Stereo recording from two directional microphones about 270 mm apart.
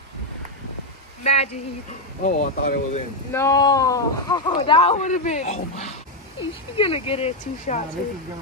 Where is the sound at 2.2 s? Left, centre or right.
Left.